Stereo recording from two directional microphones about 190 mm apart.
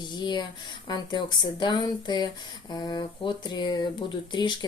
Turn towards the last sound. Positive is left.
turn(degrees=25)  # may be behind; listen again after turning